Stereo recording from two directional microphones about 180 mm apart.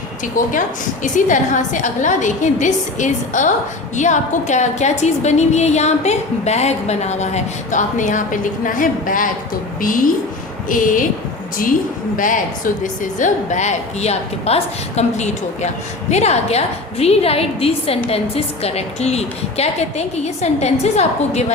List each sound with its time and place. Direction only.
0.4 s a woman's voice: 45° left (ahead or behind)
12.1 s a woman's voice: 45° left (ahead or behind)